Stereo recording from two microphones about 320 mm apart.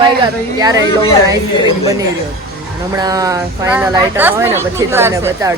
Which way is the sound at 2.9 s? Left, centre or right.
Centre.